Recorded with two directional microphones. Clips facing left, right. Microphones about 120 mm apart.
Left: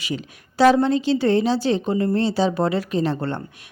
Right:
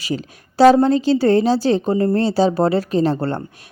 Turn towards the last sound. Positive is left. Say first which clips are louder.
# right 4 dB
turn(degrees=-35)  # may be behind; listen again after turning